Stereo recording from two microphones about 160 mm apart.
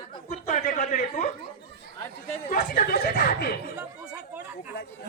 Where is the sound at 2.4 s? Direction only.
60° left (ahead or behind); by 3.5 s 75° left (ahead or behind).